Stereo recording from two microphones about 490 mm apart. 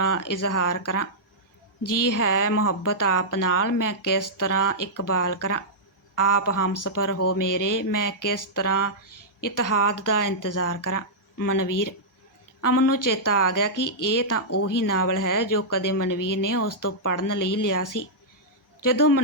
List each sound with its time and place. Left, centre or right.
0.0 s speech: left